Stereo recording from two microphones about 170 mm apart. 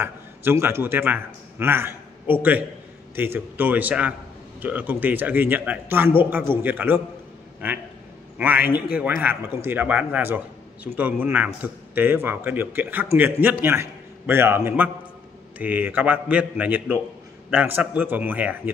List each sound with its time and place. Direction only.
0.0 s a man's voice: 15° right (ahead or behind)